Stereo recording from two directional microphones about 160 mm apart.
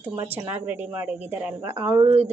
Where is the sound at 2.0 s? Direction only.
35° right (ahead or behind).